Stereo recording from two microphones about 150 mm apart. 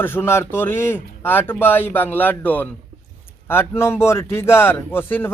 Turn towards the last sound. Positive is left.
turn(degrees=15)  # may be behind; listen again after turning